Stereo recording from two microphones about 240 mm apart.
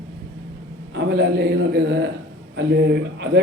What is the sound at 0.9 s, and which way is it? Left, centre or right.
A man's voice, right.